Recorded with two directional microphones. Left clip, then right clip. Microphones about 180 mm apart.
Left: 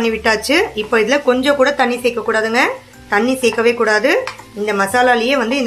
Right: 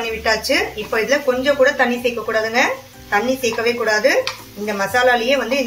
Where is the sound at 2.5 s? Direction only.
55° left (ahead or behind).